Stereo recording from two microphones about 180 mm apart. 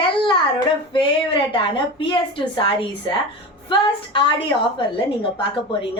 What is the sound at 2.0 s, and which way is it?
A woman's voice, 25° left (ahead or behind).